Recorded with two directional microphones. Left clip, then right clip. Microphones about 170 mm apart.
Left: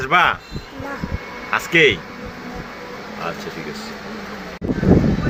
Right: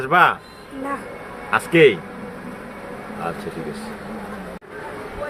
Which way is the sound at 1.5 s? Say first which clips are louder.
Right 1 dB; 10° right (ahead or behind).